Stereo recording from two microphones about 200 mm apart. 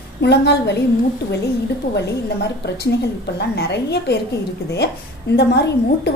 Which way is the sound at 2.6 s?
55° left (ahead or behind).